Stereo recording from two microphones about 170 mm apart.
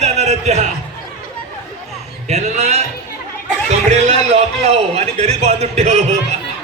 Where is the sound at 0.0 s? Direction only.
40° right (ahead or behind).